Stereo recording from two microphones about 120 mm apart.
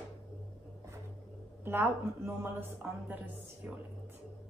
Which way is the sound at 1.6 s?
20° right (ahead or behind).